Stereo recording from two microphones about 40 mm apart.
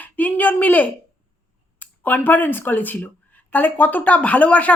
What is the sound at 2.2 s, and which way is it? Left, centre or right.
Speech, left.